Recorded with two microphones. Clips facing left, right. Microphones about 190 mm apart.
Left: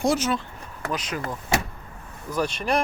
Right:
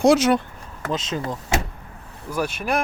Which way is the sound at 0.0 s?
80° right.